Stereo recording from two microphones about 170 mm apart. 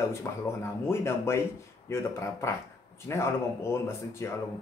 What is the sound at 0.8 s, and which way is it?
A man's voice, 15° left (ahead or behind).